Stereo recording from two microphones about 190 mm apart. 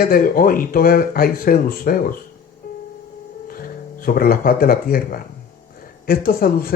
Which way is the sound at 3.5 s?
50° left (ahead or behind).